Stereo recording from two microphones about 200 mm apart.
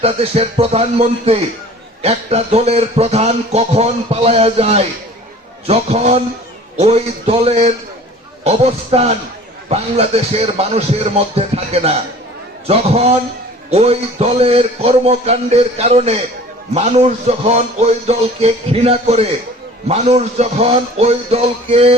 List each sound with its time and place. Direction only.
0.0 s a man's voice: 30° right (ahead or behind)